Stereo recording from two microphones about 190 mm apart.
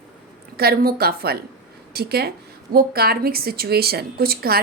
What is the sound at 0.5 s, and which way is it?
A woman's voice, 55° right (ahead or behind).